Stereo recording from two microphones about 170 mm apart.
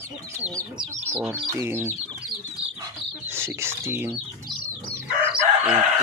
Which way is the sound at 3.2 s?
15° right (ahead or behind).